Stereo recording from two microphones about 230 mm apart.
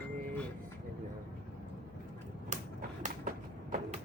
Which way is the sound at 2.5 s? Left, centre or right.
Right.